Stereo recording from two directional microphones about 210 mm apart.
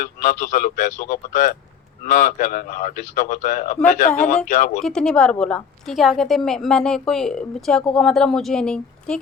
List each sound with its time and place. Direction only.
0.0 s a man's voice: 40° left (ahead or behind)
4.8 s a woman's voice: centre (ahead or behind)